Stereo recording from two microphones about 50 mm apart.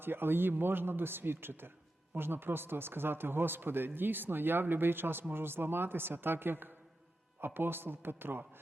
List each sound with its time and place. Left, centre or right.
0.0 s speech: right